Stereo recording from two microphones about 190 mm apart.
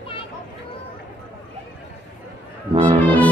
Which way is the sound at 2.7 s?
25° right (ahead or behind).